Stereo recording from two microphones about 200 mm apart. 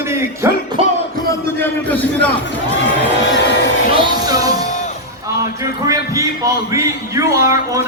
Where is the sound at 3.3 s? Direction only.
60° left (ahead or behind).